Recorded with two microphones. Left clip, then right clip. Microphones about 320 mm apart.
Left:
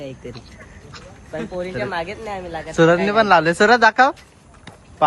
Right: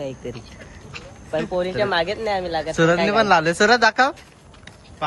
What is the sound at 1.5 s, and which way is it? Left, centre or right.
Speech, right.